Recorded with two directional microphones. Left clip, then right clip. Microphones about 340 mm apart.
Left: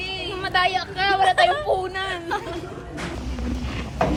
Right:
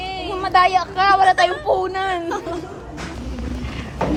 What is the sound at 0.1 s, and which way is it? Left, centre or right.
Speech, right.